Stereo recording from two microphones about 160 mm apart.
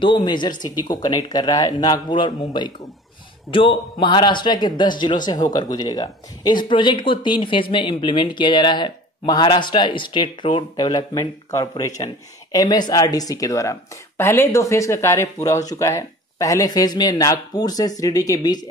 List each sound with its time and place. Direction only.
0.0 s speech: 30° left (ahead or behind)